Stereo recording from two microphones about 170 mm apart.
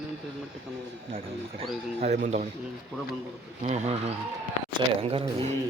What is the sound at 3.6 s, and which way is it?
Speech, 40° right (ahead or behind).